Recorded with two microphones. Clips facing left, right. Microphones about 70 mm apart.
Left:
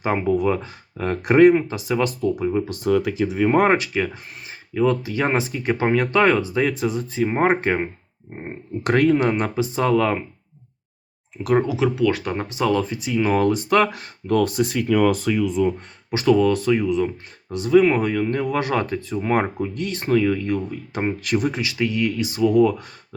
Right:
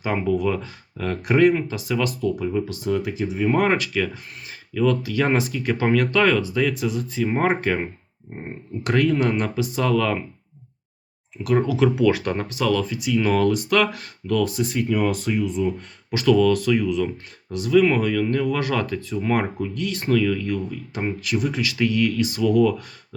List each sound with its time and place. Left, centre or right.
0.3 s speech: left
2.8 s speech: left
3.5 s speech: left
8.8 s speech: left
11.4 s speech: left
11.8 s speech: centre
12.2 s speech: centre
12.5 s speech: left
13.1 s speech: left
14.4 s speech: left
16.0 s speech: left
21.2 s speech: left
21.5 s speech: left